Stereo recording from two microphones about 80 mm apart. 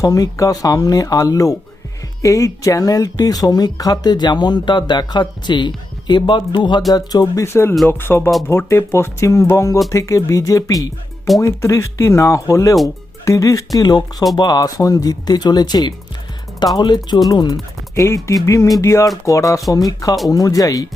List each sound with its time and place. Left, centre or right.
0.0 s speech: left
6.9 s speech: left
7.4 s speech: left
7.9 s music: left
8.4 s speech: left
17.9 s speech: left